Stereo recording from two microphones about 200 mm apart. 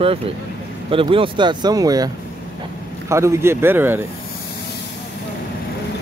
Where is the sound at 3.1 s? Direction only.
15° right (ahead or behind).